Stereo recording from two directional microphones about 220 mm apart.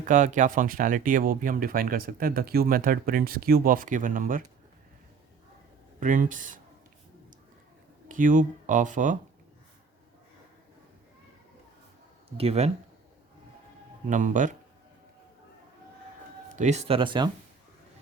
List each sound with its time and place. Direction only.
0.0 s speech: 35° right (ahead or behind)
6.0 s speech: 35° right (ahead or behind)
8.0 s speech: 35° right (ahead or behind)
12.4 s a man's voice: 30° right (ahead or behind)
14.1 s speech: 35° right (ahead or behind)
16.6 s a man's voice: 30° right (ahead or behind)